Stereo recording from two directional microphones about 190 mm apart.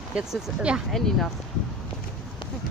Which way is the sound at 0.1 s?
5° right (ahead or behind).